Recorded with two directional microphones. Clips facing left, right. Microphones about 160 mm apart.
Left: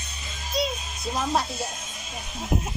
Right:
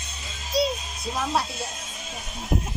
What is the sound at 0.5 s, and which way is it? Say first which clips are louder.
Music: right 4 dB; 35° right (ahead or behind).